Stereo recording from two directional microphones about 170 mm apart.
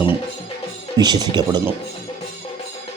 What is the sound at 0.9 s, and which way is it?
Speech, 25° right (ahead or behind).